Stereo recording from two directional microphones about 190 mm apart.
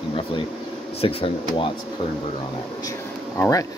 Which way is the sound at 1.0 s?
30° left (ahead or behind).